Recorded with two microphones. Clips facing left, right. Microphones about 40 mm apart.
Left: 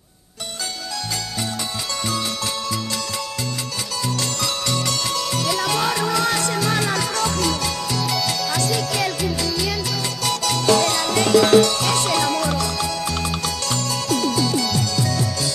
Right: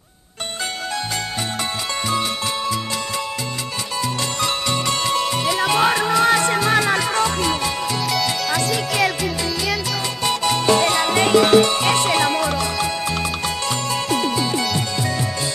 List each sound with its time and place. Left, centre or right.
4.0 s music: right
8.0 s music: centre
10.2 s music: right